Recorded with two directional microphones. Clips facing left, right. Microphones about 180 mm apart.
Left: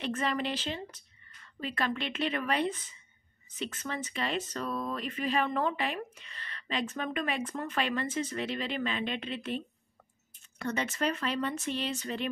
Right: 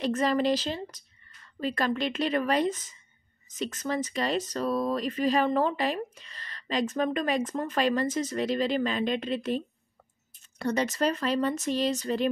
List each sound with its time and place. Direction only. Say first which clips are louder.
0.0 s speech: right 7 dB; 40° right (ahead or behind)